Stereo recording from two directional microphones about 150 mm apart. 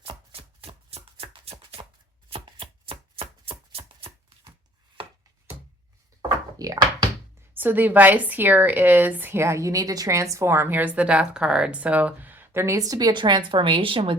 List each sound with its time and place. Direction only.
0.0 s chopping: 35° right (ahead or behind)
6.6 s speech: 25° right (ahead or behind)
7.5 s a woman's voice: 10° right (ahead or behind); by 14.2 s 35° right (ahead or behind)